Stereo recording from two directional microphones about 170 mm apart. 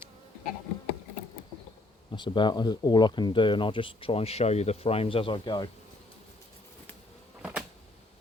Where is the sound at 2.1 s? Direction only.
25° left (ahead or behind).